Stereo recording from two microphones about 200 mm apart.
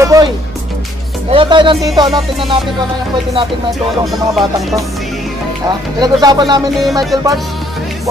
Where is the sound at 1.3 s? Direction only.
25° right (ahead or behind).